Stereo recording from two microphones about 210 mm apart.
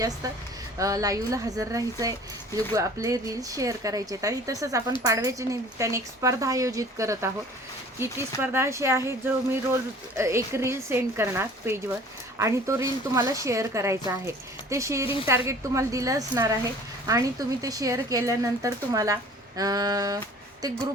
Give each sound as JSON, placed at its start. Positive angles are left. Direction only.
{"t": 0.8, "sound": "speech", "side_deg": -15}